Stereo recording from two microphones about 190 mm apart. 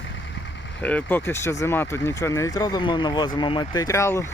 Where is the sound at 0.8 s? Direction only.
10° left (ahead or behind).